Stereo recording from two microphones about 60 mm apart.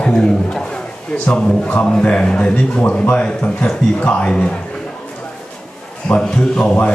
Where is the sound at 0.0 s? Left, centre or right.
Centre.